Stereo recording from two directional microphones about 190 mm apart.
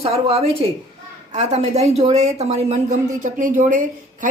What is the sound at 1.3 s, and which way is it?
A woman's voice, 35° right (ahead or behind).